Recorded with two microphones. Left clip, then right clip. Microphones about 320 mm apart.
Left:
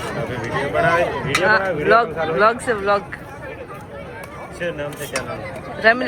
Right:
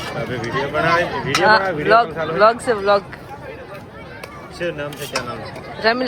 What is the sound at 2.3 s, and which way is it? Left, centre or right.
Speech, centre.